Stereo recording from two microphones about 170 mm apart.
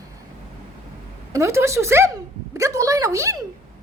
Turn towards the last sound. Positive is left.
turn(degrees=-20)  # may be behind; listen again after turning